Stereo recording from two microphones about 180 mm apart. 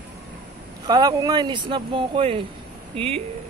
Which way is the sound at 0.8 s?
20° right (ahead or behind).